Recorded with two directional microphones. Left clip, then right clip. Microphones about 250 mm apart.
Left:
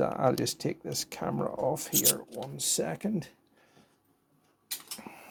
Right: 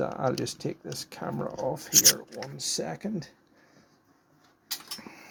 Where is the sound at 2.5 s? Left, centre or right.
Left.